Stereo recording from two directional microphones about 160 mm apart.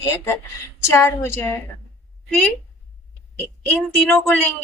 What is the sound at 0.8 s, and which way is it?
Speech, 15° left (ahead or behind).